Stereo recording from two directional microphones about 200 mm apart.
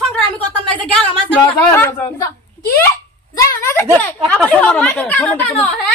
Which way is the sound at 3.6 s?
10° left (ahead or behind).